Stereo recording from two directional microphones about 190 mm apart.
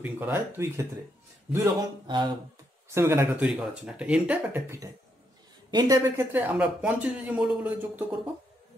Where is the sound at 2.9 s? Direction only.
15° right (ahead or behind).